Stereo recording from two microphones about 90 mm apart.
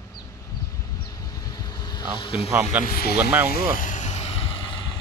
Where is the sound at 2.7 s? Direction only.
15° right (ahead or behind).